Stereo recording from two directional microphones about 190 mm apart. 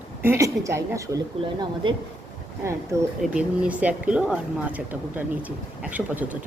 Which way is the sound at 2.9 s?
15° right (ahead or behind).